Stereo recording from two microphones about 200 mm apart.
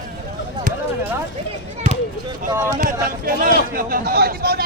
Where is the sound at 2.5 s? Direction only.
15° right (ahead or behind).